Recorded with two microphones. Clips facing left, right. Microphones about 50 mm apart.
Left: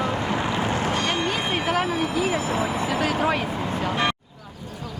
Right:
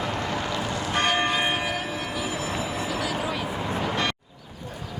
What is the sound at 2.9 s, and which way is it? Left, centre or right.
Vehicle, left.